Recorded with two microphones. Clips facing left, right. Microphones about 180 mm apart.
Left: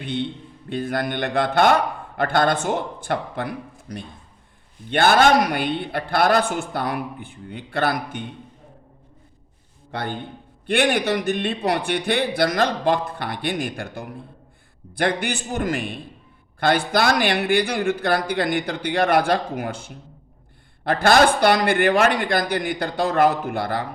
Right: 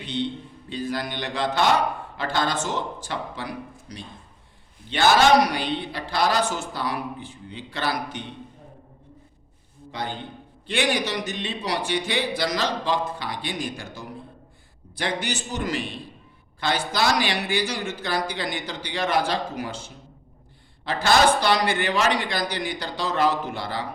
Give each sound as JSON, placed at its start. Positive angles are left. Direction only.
{"t": 0.0, "sound": "a man's voice", "side_deg": 55}
{"t": 9.9, "sound": "a man's voice", "side_deg": 60}